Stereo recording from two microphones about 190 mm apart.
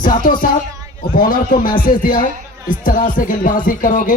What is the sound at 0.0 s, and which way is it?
A man's voice, 45° left (ahead or behind).